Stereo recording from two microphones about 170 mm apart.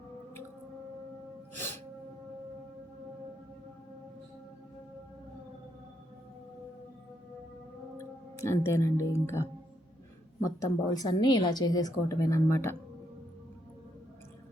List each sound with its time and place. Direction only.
7.9 s speech: 15° left (ahead or behind)
10.6 s a woman's voice: 20° left (ahead or behind)